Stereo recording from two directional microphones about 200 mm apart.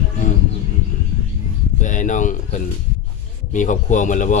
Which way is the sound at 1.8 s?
40° left (ahead or behind).